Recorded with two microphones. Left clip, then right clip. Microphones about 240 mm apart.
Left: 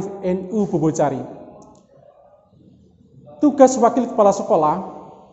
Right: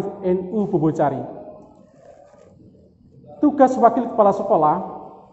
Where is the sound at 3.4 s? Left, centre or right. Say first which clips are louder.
Left 2 dB; left.